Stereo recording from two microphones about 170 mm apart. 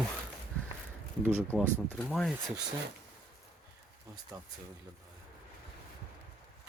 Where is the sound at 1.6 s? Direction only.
10° left (ahead or behind).